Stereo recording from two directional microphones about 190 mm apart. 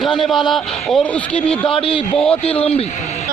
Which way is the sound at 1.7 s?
30° left (ahead or behind).